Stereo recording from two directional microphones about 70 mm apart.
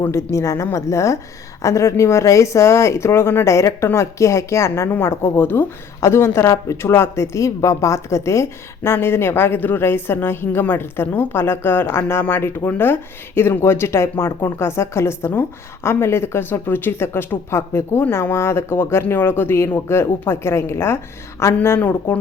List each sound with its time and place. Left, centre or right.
0.1 s speech: left
21.8 s speech: left